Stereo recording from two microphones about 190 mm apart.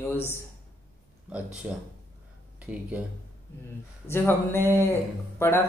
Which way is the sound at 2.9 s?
5° right (ahead or behind).